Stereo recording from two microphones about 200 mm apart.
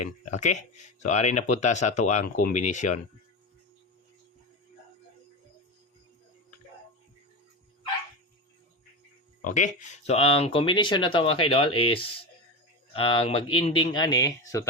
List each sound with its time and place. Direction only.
0.0 s speech: 35° left (ahead or behind)
10.1 s speech: 30° left (ahead or behind)